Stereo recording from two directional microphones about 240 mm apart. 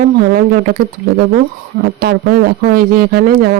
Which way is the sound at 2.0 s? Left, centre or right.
Right.